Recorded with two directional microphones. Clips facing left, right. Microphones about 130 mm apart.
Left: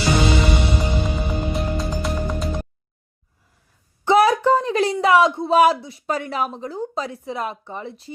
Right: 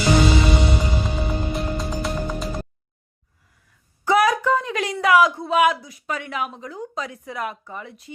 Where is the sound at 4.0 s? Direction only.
25° left (ahead or behind).